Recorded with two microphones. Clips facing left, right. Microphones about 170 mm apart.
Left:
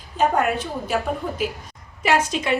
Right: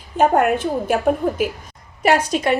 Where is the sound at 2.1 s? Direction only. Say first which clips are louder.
Right 4 dB; 50° right (ahead or behind).